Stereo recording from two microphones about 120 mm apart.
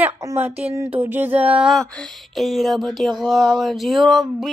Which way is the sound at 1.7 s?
5° left (ahead or behind).